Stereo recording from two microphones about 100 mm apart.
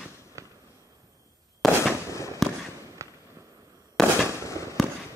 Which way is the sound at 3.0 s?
30° right (ahead or behind).